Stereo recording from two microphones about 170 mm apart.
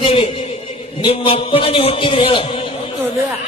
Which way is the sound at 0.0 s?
30° left (ahead or behind).